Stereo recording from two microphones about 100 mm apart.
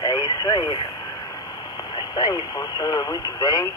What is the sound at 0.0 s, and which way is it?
Radio, 40° left (ahead or behind).